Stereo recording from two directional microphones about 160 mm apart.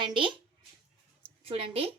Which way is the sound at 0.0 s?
30° right (ahead or behind).